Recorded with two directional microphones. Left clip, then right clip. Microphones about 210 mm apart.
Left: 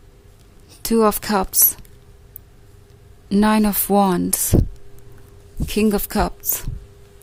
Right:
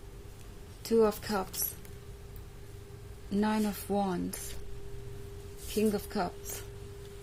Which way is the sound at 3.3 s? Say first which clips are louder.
Left 14 dB; 45° left (ahead or behind).